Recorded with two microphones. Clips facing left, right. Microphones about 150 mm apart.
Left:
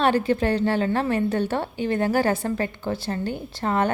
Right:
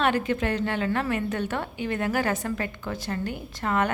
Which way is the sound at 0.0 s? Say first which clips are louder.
Left 4 dB; 35° left (ahead or behind).